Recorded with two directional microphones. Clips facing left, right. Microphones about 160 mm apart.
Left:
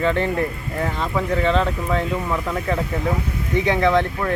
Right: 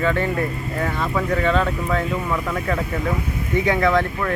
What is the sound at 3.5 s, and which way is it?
Speech, 20° left (ahead or behind).